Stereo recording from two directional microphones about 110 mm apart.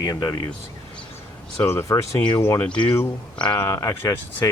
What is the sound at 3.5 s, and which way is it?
Speech, 30° left (ahead or behind).